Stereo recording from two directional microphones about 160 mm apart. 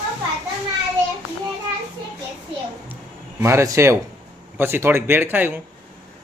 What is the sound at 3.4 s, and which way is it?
Speech, 15° right (ahead or behind).